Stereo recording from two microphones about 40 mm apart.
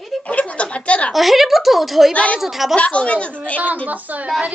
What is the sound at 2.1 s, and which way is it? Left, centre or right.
Speech, left.